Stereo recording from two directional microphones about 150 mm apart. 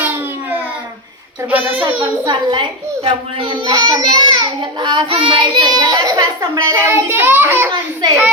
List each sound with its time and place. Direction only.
1.5 s a child's voice: 10° right (ahead or behind)
2.2 s a child's voice: 30° right (ahead or behind); by 7.7 s 15° right (ahead or behind)